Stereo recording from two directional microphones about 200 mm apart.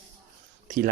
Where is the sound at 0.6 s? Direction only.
40° right (ahead or behind).